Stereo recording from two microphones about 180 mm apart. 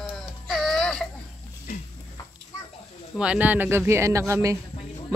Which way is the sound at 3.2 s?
5° right (ahead or behind).